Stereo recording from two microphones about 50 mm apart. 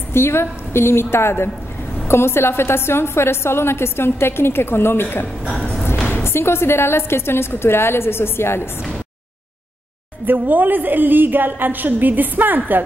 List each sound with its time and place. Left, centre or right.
0.1 s a woman's voice: left
5.5 s a sound: centre
6.2 s a woman's voice: left
10.2 s a woman's voice: right